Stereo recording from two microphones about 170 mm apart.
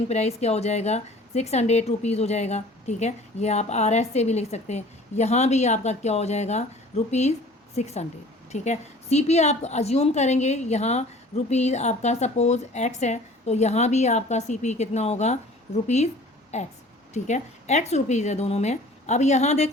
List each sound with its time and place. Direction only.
0.1 s a woman's voice: 40° left (ahead or behind)